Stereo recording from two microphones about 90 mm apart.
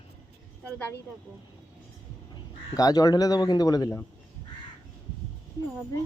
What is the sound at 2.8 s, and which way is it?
Speech, 45° left (ahead or behind).